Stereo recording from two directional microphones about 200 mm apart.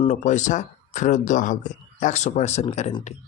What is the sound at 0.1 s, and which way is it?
Speech, 35° left (ahead or behind).